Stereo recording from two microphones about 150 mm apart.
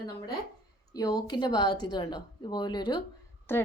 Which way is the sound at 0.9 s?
25° left (ahead or behind).